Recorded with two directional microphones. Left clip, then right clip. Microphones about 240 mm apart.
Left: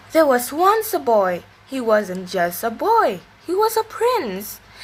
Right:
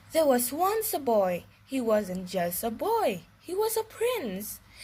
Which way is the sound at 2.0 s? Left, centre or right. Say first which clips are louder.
Left 8 dB; right.